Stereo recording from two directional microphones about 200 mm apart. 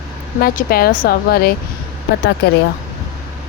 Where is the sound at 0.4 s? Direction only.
50° left (ahead or behind).